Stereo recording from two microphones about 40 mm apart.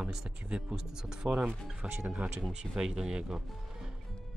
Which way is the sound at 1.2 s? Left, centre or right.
Centre.